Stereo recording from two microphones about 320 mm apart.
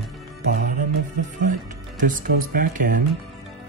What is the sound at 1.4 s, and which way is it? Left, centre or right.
Speech, right.